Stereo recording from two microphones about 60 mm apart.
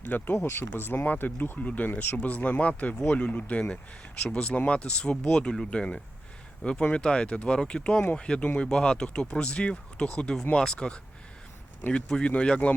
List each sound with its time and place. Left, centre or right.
0.0 s speech: left
0.3 s speech: left
0.7 s speech: left; by 11.0 s centre
12.0 s speech: centre